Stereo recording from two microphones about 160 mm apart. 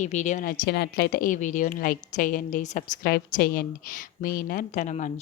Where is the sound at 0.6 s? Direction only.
90° left; by 2.8 s 55° left (ahead or behind).